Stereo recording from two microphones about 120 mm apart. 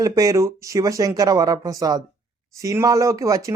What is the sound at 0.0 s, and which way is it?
Speech, 30° right (ahead or behind).